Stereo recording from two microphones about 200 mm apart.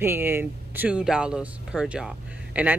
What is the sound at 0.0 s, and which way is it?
Speech, 10° right (ahead or behind).